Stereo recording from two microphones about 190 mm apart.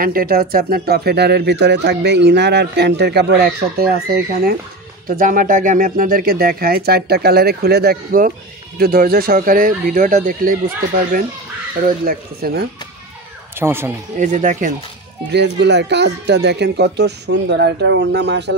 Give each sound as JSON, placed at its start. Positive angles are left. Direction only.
{"t": 0.0, "sound": "speech", "side_deg": -50}
{"t": 12.1, "sound": "speech", "side_deg": -55}
{"t": 13.6, "sound": "speech", "side_deg": -10}
{"t": 14.2, "sound": "speech", "side_deg": -40}
{"t": 15.3, "sound": "speech", "side_deg": -65}